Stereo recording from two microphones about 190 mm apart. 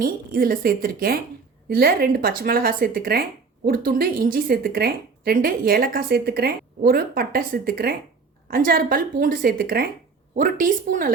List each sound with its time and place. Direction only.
0.0 s a woman's voice: 50° right (ahead or behind)